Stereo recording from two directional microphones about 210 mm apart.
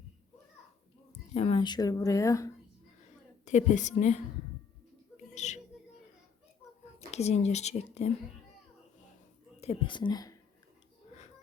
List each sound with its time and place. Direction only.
1.3 s speech: 30° left (ahead or behind)
3.4 s speech: 35° left (ahead or behind)
5.1 s a sound: 35° left (ahead or behind)
7.1 s speech: 30° left (ahead or behind)
9.6 s speech: 25° left (ahead or behind)